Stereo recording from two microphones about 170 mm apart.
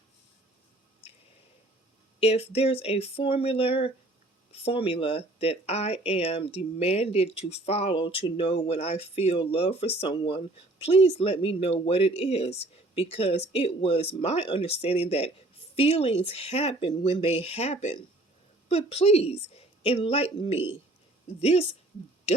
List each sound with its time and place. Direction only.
2.2 s speech: 35° left (ahead or behind)